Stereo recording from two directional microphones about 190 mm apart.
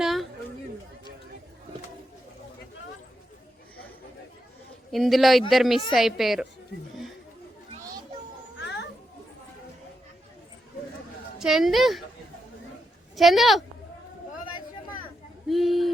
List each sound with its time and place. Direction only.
0.0 s chatter: centre (ahead or behind)
4.9 s speech: centre (ahead or behind)
8.6 s children playing: 65° left (ahead or behind)
11.3 s speech: centre (ahead or behind)
13.1 s speech: centre (ahead or behind)
15.4 s a sound: centre (ahead or behind)